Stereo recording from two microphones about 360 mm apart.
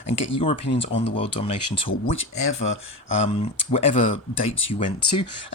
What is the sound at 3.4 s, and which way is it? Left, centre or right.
Speech, centre.